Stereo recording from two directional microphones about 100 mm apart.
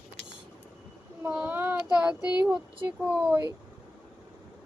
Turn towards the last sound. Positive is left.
turn(degrees=-10)  # may be behind; listen again after turning